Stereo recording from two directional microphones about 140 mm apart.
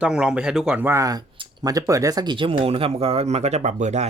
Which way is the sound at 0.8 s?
20° right (ahead or behind).